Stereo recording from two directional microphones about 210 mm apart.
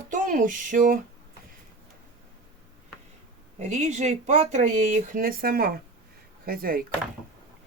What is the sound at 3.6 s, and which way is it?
Speech, 35° right (ahead or behind).